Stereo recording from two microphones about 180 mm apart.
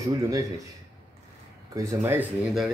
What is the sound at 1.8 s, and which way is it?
Speech, 15° right (ahead or behind).